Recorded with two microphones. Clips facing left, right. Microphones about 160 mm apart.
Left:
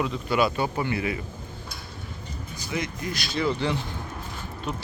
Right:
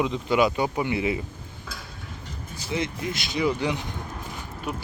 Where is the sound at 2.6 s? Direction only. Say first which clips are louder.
Right 2 dB; 25° right (ahead or behind).